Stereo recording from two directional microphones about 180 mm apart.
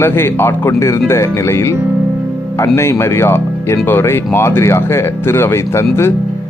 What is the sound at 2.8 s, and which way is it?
Speech, 15° left (ahead or behind).